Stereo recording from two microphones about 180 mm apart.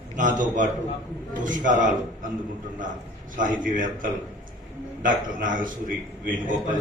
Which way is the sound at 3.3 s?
45° right (ahead or behind).